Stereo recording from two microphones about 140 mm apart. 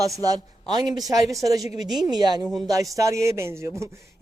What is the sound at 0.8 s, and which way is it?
A man's voice, 30° right (ahead or behind).